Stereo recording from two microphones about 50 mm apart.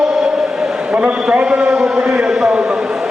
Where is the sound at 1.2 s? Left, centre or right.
Centre.